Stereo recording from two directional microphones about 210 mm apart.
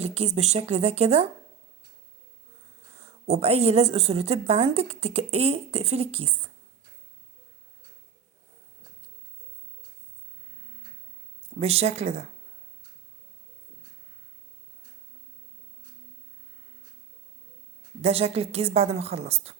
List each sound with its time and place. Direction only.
0.0 s speech: 30° right (ahead or behind)
3.0 s speech: 30° right (ahead or behind)
11.6 s a woman's voice: 30° right (ahead or behind)
18.0 s a woman's voice: 30° right (ahead or behind)